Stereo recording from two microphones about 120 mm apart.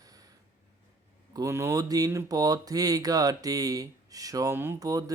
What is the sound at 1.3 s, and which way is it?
Speech, 25° right (ahead or behind).